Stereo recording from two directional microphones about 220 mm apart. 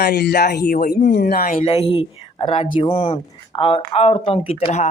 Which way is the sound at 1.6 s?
25° left (ahead or behind).